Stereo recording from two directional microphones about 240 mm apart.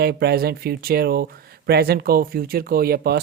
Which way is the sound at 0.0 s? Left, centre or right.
Right.